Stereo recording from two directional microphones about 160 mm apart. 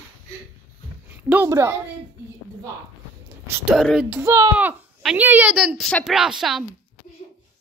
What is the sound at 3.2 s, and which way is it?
Whispering, 15° right (ahead or behind).